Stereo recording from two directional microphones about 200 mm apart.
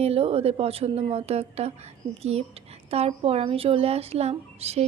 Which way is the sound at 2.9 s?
30° right (ahead or behind).